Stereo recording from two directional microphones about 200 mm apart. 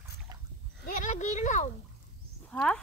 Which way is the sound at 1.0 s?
35° left (ahead or behind).